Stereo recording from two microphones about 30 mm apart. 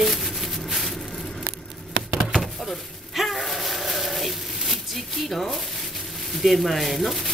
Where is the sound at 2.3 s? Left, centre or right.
Centre.